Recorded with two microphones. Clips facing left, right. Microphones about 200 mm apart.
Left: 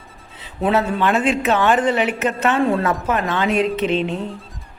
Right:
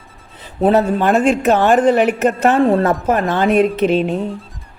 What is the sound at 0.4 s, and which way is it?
Speech, 40° right (ahead or behind).